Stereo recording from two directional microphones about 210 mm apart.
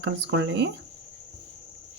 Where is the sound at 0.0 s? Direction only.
60° right (ahead or behind).